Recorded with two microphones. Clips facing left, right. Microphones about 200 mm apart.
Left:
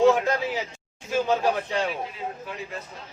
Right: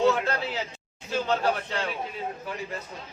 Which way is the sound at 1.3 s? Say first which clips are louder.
Left 1 dB; 15° left (ahead or behind).